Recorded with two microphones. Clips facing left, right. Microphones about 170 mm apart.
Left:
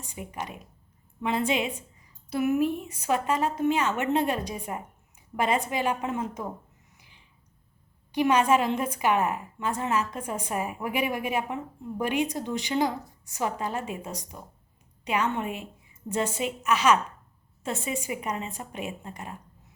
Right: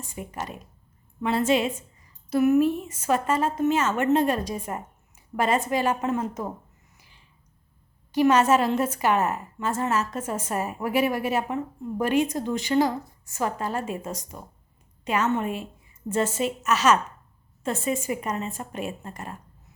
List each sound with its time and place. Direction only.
0.2 s a woman's voice: 10° left (ahead or behind)
5.3 s a woman's voice: centre (ahead or behind)
5.7 s a woman's voice: 15° left (ahead or behind)
8.1 s a woman's voice: 15° left (ahead or behind)
14.0 s speech: 45° right (ahead or behind)
15.0 s a woman's voice: 10° left (ahead or behind)